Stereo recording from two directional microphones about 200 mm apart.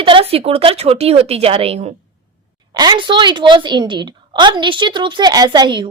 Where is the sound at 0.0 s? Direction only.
25° right (ahead or behind).